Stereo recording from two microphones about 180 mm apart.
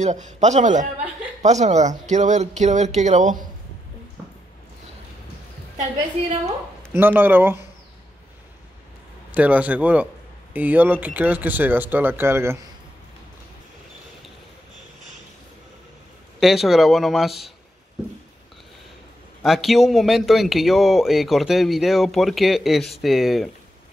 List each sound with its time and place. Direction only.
0.0 s speech: 40° right (ahead or behind)
6.9 s speech: 10° right (ahead or behind)
9.3 s speech: 10° right (ahead or behind)
16.3 s speech: centre (ahead or behind)
19.4 s speech: centre (ahead or behind)